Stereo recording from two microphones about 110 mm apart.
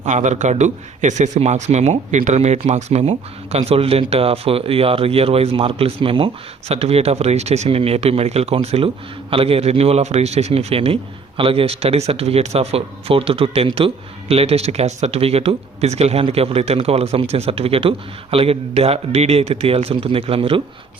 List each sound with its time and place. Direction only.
0.0 s a man's voice: 90° right; by 20.6 s 60° right (ahead or behind)